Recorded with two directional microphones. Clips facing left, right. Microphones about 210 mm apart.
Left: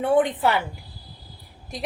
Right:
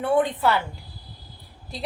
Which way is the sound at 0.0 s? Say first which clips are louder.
Left 1 dB; 20° left (ahead or behind).